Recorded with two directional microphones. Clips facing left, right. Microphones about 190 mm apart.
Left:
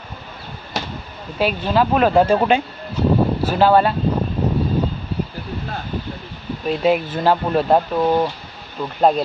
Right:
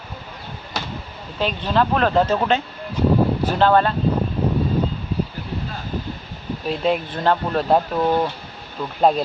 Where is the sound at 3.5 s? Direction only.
10° left (ahead or behind).